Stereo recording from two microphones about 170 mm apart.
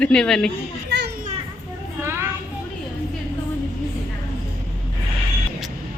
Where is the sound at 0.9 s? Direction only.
80° right.